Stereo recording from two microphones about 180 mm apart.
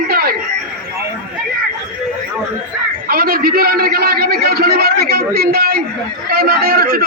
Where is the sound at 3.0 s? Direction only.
55° right (ahead or behind).